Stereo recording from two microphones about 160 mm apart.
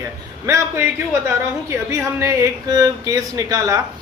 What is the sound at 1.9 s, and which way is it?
Speech, 20° right (ahead or behind).